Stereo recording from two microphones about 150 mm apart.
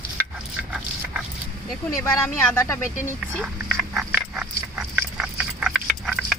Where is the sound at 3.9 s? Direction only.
5° right (ahead or behind).